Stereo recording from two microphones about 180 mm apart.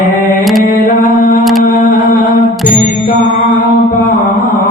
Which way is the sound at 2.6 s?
45° left (ahead or behind).